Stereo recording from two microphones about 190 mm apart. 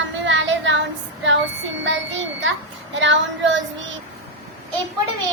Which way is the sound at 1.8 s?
70° right (ahead or behind).